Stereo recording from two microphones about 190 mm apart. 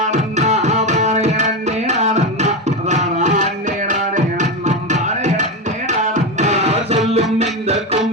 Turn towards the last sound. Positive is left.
turn(degrees=-35)  # may be behind; listen again after turning